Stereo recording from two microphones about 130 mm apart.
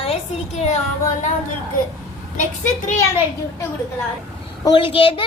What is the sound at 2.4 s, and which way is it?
Speech, 70° left (ahead or behind).